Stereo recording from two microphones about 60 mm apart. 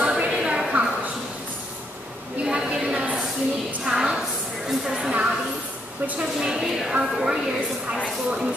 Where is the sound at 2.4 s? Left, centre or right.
Centre.